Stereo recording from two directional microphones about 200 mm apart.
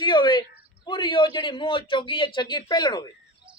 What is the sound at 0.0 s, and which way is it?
A man's voice, 20° left (ahead or behind).